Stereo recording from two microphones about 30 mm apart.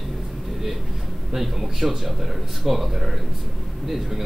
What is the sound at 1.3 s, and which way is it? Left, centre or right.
A man's voice, centre.